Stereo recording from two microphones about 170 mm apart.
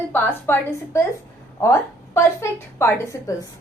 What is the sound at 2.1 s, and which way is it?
A woman's voice, 15° left (ahead or behind).